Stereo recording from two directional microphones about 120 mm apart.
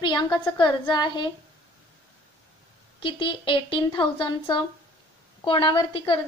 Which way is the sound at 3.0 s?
45° left (ahead or behind).